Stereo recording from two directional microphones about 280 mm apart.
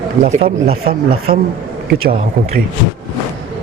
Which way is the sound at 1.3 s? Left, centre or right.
Right.